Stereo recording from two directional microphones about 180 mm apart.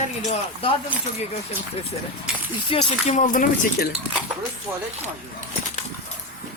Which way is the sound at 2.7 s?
35° left (ahead or behind).